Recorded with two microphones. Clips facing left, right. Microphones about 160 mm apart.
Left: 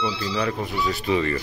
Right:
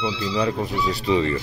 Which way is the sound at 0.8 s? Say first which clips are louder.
Right 2 dB; 30° right (ahead or behind).